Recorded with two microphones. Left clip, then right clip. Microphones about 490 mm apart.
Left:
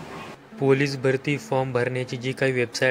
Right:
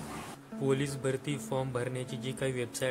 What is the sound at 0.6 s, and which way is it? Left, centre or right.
Speech, right.